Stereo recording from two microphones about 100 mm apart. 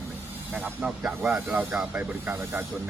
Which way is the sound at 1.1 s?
20° right (ahead or behind).